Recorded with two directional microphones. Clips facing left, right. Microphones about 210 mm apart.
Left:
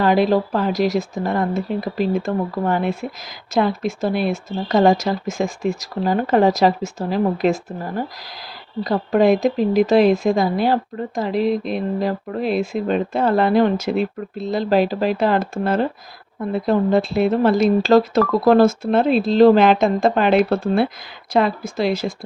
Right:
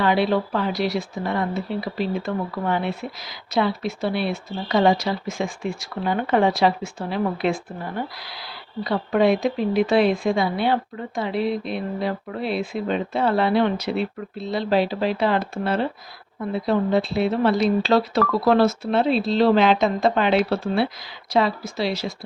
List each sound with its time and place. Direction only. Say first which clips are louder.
0.0 s speech: left 4 dB; 45° left (ahead or behind)